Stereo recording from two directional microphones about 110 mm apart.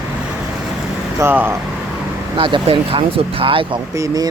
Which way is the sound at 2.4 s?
50° right (ahead or behind).